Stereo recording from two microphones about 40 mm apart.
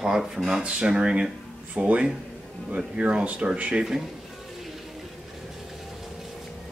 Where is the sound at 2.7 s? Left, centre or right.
Right.